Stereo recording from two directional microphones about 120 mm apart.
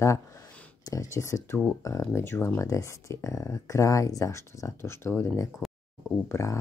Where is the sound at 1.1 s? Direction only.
25° left (ahead or behind).